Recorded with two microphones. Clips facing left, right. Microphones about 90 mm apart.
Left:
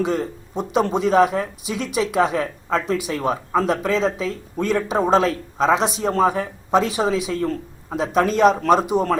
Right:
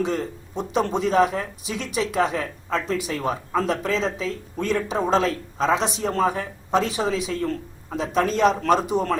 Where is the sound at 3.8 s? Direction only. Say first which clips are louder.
Left 4 dB; 40° left (ahead or behind).